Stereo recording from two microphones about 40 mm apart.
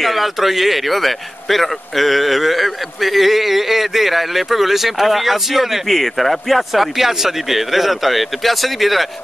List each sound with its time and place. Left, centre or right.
0.0 s speech: centre